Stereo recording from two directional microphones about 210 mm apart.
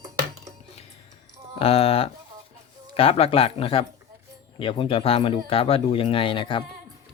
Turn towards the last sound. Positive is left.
turn(degrees=25)  # may be behind; listen again after turning